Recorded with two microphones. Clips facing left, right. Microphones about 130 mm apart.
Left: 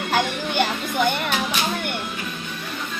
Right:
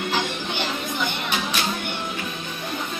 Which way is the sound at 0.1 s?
50° left (ahead or behind).